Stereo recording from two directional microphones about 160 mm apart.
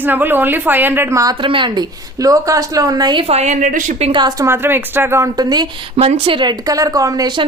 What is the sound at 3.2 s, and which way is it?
Speech, 45° right (ahead or behind).